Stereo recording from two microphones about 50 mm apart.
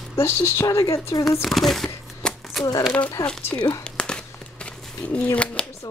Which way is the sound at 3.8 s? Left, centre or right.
Centre.